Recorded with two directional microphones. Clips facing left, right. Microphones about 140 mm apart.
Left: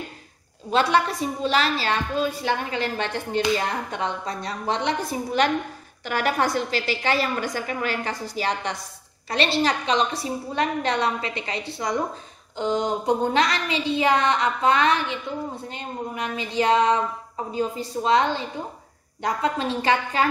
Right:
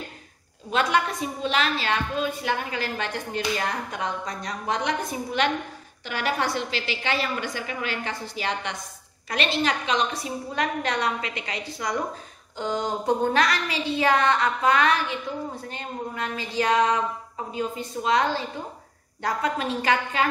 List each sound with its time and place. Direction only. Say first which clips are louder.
0.7 s a woman's voice: left 3 dB; 30° left (ahead or behind)
17.5 s a woman's voice: left 3 dB; 35° left (ahead or behind)